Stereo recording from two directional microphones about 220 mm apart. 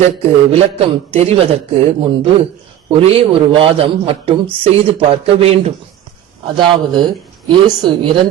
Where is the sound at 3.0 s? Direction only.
25° right (ahead or behind).